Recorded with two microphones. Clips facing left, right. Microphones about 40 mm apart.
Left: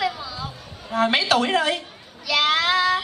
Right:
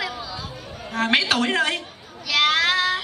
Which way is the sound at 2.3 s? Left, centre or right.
Centre.